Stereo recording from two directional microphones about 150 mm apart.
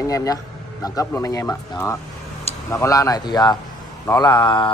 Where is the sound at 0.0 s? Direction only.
25° left (ahead or behind).